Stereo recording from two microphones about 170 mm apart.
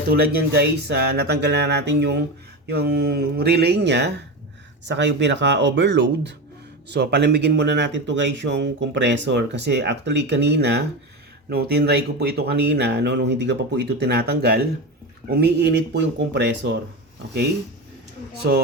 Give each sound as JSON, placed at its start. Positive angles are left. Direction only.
{"t": 0.1, "sound": "speech", "side_deg": -65}
{"t": 2.6, "sound": "speech", "side_deg": -70}
{"t": 11.4, "sound": "speech", "side_deg": -70}
{"t": 18.5, "sound": "speech", "side_deg": -75}